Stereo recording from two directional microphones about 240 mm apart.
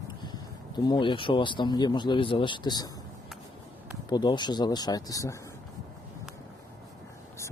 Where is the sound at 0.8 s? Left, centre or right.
Centre.